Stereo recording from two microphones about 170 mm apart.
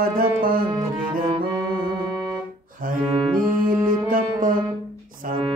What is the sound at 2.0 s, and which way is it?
Organ, 25° right (ahead or behind).